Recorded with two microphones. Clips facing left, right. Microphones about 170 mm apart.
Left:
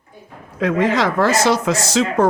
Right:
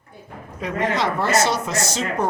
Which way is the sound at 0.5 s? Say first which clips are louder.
Left 6 dB; 90° left.